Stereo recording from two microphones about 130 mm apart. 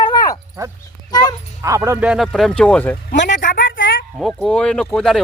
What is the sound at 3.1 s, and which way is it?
Speech, 90° left.